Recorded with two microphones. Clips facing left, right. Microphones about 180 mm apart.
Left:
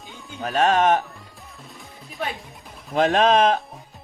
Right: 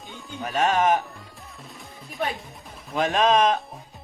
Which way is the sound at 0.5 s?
30° left (ahead or behind).